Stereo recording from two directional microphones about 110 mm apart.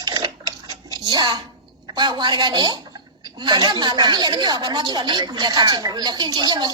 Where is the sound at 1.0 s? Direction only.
40° right (ahead or behind).